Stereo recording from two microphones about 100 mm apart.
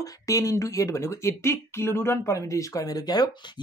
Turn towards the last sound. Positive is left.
turn(degrees=40)  # may be behind; listen again after turning